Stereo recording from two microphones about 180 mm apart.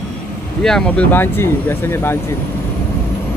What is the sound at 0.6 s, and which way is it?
Speech, 5° left (ahead or behind).